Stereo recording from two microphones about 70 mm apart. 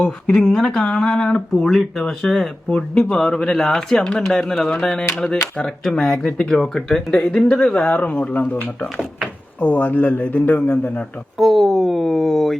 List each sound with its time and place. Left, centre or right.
0.0 s speech: centre
7.9 s speech: left
11.3 s speech: centre